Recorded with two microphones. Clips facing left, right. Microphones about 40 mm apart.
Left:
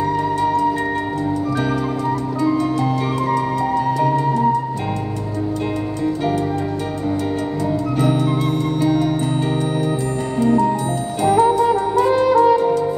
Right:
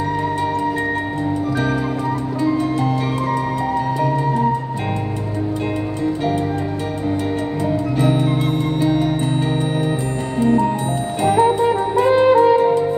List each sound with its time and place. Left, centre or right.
0.0 s music: right
3.3 s music: right
8.8 s music: right
10.4 s music: right